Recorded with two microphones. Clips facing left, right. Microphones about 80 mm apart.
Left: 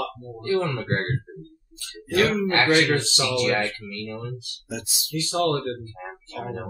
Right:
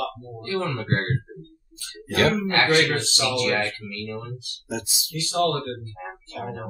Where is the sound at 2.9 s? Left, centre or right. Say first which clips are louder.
Left 1 dB; left.